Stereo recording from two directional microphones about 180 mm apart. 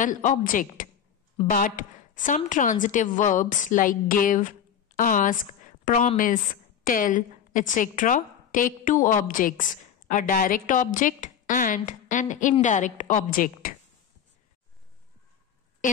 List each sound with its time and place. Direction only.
0.0 s a woman's voice: 45° left (ahead or behind)